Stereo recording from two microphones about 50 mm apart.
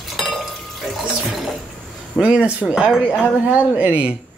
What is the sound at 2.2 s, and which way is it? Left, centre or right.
Speech, right.